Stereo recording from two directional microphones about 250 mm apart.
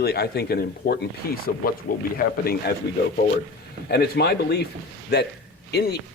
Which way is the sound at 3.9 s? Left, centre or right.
Left.